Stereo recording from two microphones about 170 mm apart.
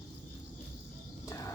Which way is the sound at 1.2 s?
20° left (ahead or behind).